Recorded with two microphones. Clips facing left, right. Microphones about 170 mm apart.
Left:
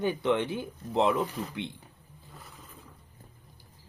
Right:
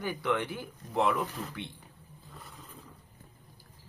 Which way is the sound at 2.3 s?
Centre (ahead or behind).